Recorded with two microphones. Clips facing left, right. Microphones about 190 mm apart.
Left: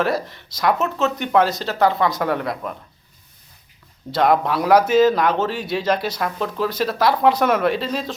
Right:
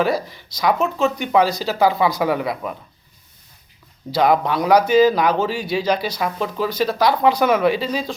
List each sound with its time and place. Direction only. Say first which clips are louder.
0.0 s speech: right 1 dB; centre (ahead or behind)
4.1 s speech: right 1 dB; centre (ahead or behind)